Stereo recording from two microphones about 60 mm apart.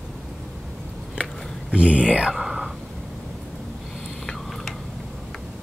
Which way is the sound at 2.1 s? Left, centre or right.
Centre.